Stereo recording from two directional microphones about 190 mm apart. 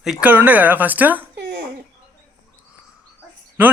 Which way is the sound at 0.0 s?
5° right (ahead or behind).